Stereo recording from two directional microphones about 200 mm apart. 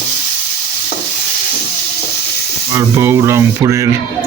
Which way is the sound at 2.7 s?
15° right (ahead or behind).